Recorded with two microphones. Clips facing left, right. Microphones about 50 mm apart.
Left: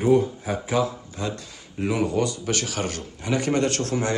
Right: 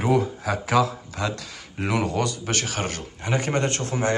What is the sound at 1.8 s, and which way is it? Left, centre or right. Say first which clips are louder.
A man's voice: left 1 dB; right.